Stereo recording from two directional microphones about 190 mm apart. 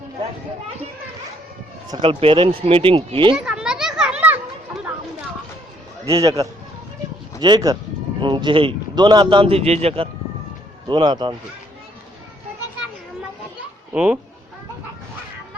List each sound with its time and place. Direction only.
1.9 s a man's voice: 25° right (ahead or behind)
3.3 s children playing: 5° right (ahead or behind)
6.1 s a man's voice: 15° right (ahead or behind)
13.9 s speech: 5° right (ahead or behind)